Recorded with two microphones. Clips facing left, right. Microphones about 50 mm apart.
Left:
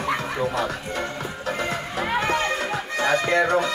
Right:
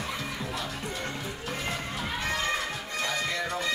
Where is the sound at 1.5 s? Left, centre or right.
Left.